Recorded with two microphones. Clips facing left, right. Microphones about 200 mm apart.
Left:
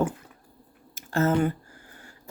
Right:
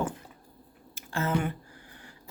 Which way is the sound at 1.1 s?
45° left (ahead or behind).